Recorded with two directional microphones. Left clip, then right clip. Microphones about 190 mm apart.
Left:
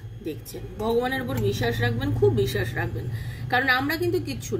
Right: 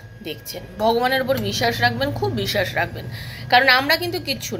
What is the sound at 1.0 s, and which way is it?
Speech, 15° left (ahead or behind).